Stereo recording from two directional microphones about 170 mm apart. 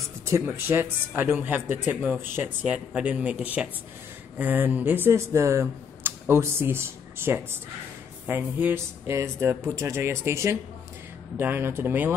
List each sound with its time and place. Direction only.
0.2 s speech: 15° right (ahead or behind)